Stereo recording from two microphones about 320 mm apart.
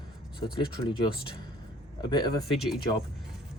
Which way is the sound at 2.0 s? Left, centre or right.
Centre.